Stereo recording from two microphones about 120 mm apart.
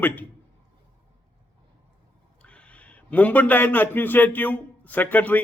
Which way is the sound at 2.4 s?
10° left (ahead or behind).